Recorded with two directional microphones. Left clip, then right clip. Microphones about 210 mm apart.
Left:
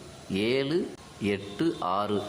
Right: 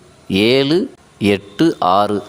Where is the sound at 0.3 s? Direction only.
45° right (ahead or behind).